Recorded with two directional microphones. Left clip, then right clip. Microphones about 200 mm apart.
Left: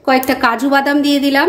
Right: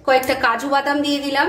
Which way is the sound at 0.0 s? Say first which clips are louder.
Left 3 dB; 35° left (ahead or behind).